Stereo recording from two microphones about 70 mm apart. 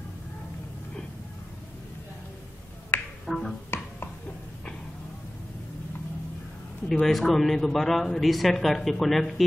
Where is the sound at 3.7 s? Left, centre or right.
Left.